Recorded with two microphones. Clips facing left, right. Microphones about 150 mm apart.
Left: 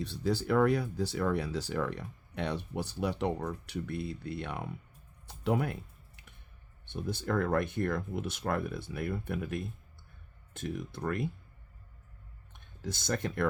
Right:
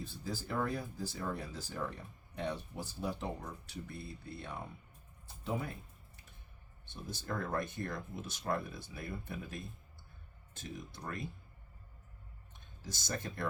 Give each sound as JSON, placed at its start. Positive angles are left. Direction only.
{"t": 0.0, "sound": "speech", "side_deg": 75}
{"t": 5.2, "sound": "music", "side_deg": 70}
{"t": 6.8, "sound": "speech", "side_deg": 60}
{"t": 12.5, "sound": "speech", "side_deg": 60}